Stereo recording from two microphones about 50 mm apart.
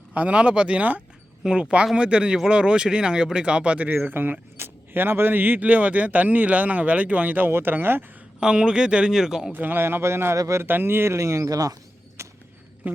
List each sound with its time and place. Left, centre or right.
0.1 s speech: right
1.5 s speech: centre
4.1 s speech: right
8.4 s speech: centre
9.6 s speech: right
9.8 s speech: right
12.8 s a sound: right